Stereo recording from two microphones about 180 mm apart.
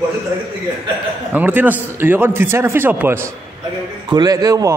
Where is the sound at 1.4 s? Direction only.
10° right (ahead or behind).